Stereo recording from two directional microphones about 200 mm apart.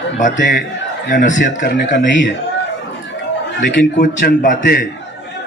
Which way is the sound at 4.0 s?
40° left (ahead or behind).